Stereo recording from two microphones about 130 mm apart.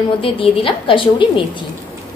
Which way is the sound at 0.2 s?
45° left (ahead or behind).